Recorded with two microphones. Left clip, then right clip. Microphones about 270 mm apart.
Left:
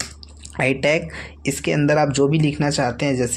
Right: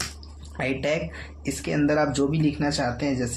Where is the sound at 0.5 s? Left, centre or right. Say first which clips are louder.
Left 7 dB; left.